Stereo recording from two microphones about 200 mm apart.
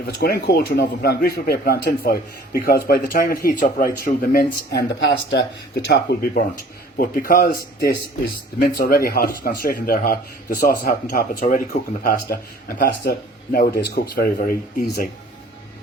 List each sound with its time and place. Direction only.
0.2 s speech: 50° left (ahead or behind)